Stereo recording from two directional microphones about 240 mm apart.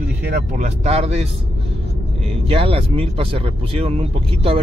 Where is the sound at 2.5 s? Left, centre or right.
Right.